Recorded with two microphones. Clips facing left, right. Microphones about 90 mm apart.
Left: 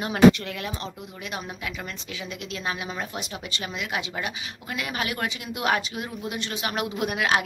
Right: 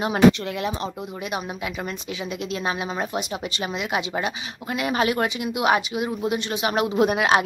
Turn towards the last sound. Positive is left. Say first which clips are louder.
# right 6 dB
turn(degrees=-25)  # may be behind; listen again after turning